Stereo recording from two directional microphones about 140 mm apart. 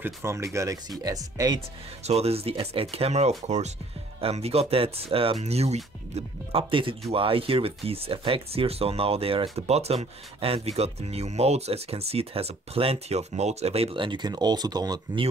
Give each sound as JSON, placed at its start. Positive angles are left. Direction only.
{"t": 0.0, "sound": "speech", "side_deg": -20}
{"t": 2.0, "sound": "speech", "side_deg": -50}